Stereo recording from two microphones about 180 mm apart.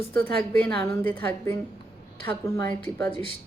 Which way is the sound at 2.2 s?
10° left (ahead or behind).